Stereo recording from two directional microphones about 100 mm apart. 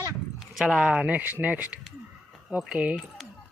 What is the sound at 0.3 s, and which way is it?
Speech, 5° right (ahead or behind).